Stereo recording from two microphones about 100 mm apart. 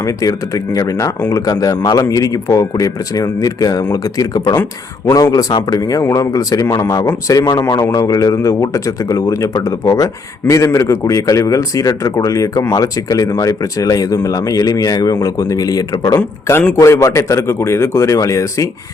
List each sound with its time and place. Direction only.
0.0 s a man's voice: 35° left (ahead or behind)
16.1 s speech: 25° left (ahead or behind)